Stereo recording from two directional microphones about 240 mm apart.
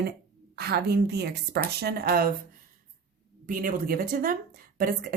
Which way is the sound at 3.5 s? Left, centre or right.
Right.